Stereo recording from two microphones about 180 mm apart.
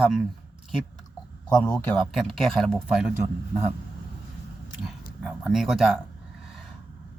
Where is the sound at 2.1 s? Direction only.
Centre (ahead or behind).